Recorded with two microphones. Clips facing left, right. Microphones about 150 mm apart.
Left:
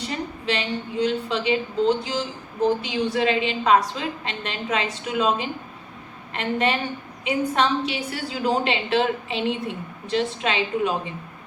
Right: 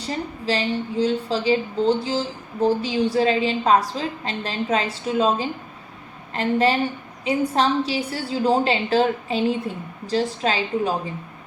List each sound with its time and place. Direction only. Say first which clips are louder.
0.4 s a woman's voice: right 4 dB; 35° right (ahead or behind)